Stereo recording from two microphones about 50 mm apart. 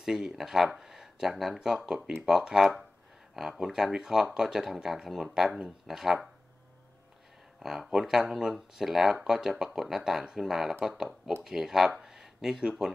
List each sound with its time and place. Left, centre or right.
0.0 s speech: centre
7.6 s speech: centre
12.0 s a sound: centre